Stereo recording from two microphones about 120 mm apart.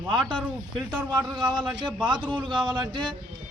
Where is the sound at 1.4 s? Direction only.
40° right (ahead or behind).